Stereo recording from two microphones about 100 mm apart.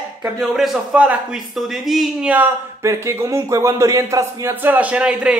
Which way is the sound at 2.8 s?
30° right (ahead or behind).